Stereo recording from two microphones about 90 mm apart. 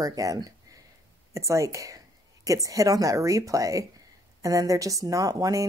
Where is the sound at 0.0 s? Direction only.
40° right (ahead or behind).